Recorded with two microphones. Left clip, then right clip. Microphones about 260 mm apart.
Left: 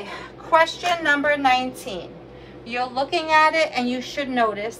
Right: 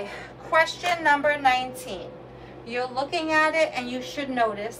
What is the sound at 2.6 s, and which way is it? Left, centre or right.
A woman's voice, left.